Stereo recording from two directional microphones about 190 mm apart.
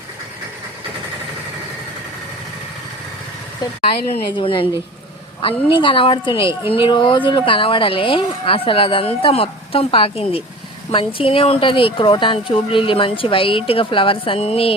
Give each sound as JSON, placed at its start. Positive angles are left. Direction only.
{"t": 4.1, "sound": "speech", "side_deg": 25}